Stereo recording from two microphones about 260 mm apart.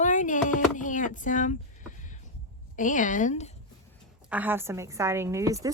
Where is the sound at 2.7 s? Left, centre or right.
Left.